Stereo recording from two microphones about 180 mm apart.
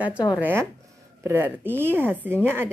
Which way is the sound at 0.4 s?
10° right (ahead or behind).